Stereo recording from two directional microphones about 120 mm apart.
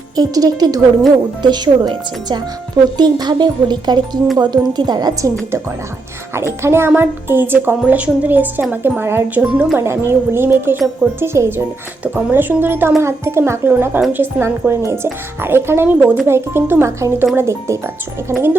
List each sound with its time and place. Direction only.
0.2 s speech: 30° right (ahead or behind)
6.3 s speech: 20° right (ahead or behind)